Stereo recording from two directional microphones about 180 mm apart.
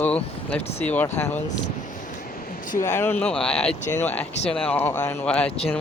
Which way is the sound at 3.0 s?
10° left (ahead or behind).